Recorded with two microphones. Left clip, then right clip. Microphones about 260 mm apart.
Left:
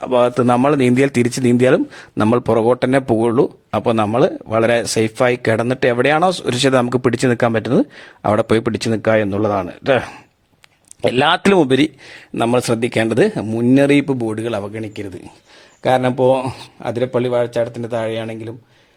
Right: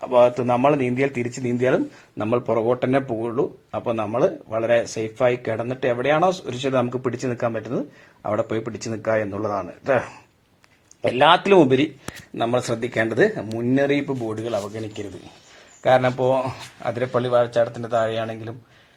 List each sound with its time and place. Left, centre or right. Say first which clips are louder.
0.0 s a man's voice: left 2 dB; left
15.8 s speech: left 3 dB; left